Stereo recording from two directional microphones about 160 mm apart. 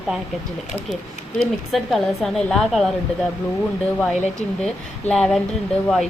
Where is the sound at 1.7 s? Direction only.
Centre (ahead or behind).